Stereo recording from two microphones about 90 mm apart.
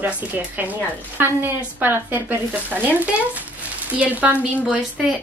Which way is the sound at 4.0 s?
15° right (ahead or behind).